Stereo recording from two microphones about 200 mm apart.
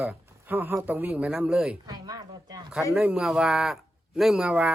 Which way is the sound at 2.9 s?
5° right (ahead or behind).